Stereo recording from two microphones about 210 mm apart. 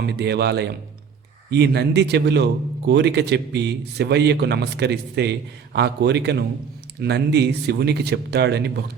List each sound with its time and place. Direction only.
0.0 s a man's voice: 50° right (ahead or behind)